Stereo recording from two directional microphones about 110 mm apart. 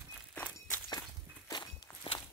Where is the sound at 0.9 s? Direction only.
35° left (ahead or behind).